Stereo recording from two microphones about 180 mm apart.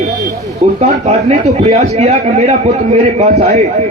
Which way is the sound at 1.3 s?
35° right (ahead or behind).